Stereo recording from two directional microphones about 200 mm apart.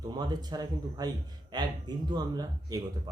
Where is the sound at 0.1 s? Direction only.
20° right (ahead or behind).